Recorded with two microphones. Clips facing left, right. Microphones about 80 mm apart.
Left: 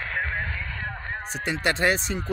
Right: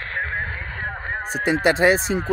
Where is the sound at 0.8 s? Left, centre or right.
Right.